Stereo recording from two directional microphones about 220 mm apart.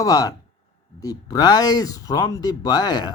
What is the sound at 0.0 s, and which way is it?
Speech, 15° left (ahead or behind).